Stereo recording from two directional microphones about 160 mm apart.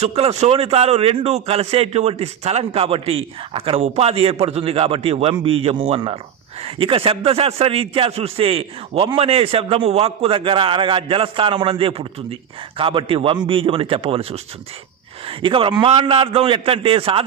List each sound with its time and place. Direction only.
0.0 s a man's voice: 40° right (ahead or behind)